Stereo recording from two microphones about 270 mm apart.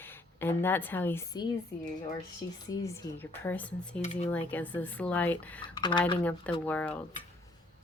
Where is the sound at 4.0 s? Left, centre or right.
Left.